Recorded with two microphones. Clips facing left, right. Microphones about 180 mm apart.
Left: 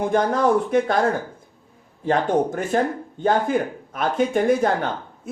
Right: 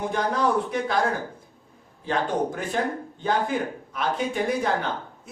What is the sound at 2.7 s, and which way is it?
Speech, 50° left (ahead or behind).